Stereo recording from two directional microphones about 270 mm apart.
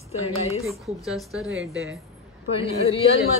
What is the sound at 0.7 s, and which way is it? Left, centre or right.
Speech, centre.